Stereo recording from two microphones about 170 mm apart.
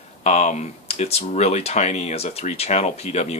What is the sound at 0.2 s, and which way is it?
Speech, 40° left (ahead or behind).